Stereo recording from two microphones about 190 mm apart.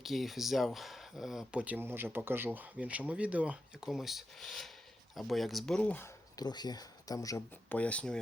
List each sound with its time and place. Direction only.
0.0 s speech: centre (ahead or behind)
6.4 s speech: 20° left (ahead or behind); by 8.2 s 5° left (ahead or behind)